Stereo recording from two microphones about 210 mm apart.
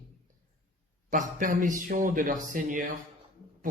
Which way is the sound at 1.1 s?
40° right (ahead or behind).